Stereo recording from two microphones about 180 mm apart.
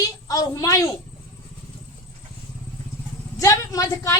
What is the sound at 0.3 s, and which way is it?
Speech, 20° left (ahead or behind).